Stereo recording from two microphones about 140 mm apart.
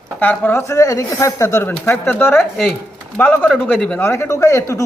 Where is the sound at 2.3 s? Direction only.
Centre (ahead or behind).